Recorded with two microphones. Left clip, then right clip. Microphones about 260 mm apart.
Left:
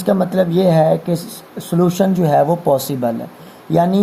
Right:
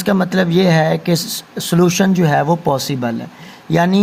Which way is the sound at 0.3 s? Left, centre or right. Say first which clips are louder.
Right 1 dB; right.